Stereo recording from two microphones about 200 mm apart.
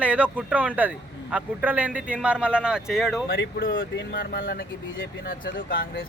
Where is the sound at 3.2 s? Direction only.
65° left (ahead or behind).